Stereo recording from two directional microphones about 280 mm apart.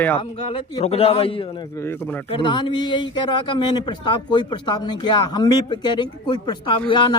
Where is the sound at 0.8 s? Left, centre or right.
Left.